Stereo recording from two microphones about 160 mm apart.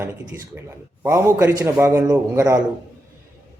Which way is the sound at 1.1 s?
15° right (ahead or behind).